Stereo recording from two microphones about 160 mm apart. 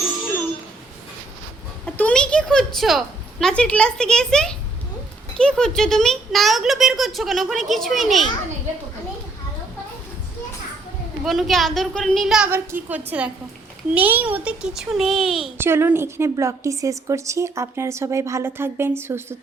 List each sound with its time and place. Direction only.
2.0 s a sound: 5° left (ahead or behind)
3.4 s speech: 5° left (ahead or behind)
11.2 s speech: centre (ahead or behind)
12.5 s a woman's voice: 15° right (ahead or behind)
15.5 s a woman's voice: 15° right (ahead or behind)